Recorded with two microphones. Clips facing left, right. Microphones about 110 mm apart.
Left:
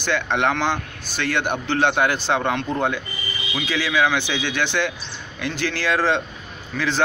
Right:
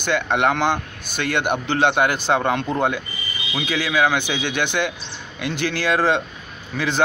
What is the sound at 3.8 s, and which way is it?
Speech, 45° right (ahead or behind).